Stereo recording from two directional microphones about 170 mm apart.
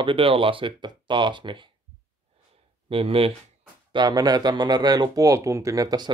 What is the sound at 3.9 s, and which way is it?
Speech, 25° right (ahead or behind).